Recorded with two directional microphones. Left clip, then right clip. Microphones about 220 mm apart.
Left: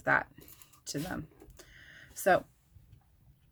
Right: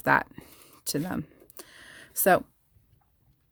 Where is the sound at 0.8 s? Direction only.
55° right (ahead or behind).